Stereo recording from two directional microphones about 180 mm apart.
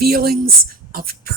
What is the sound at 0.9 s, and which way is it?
Beatboxing, 55° right (ahead or behind).